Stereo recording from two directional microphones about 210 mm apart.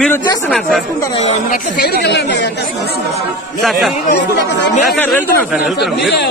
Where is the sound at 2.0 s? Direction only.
55° left (ahead or behind).